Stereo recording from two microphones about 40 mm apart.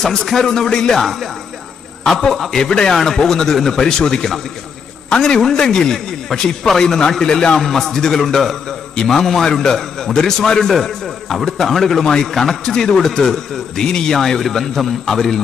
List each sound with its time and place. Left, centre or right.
0.0 s a man's voice: centre
1.0 s speech: centre
2.3 s speech: centre
2.6 s a man's voice: centre
7.6 s a man's voice: centre